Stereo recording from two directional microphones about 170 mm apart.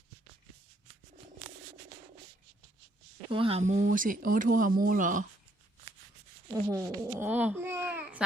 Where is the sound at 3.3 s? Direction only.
30° right (ahead or behind); by 5.2 s 50° right (ahead or behind).